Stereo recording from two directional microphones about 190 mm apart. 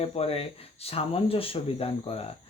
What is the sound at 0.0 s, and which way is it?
Speech, 30° left (ahead or behind).